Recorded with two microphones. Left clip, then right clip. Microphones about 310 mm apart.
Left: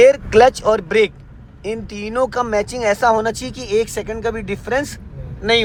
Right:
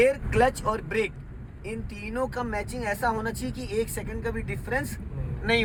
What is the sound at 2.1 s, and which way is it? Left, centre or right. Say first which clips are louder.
Speech: left 12 dB; left.